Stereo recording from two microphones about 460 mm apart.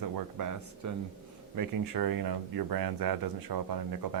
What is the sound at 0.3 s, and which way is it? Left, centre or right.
Speech, right.